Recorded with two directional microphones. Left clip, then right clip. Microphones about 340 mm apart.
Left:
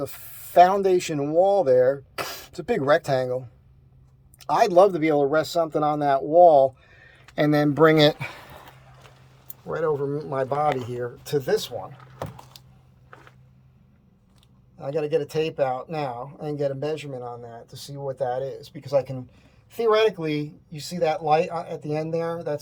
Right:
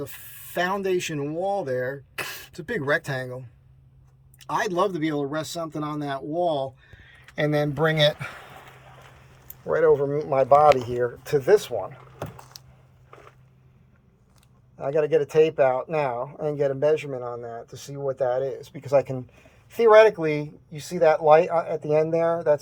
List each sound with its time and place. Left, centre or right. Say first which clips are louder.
0.0 s speech: left 4 dB; centre
4.4 s speech: left 7 dB; centre
9.6 s speech: right 5 dB; centre
14.8 s speech: right 3 dB; centre